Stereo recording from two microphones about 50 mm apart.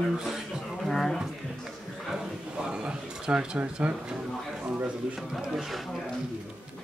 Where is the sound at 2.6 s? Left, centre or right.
Centre.